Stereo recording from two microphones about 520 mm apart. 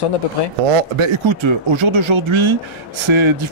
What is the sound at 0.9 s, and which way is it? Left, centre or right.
Speech, right.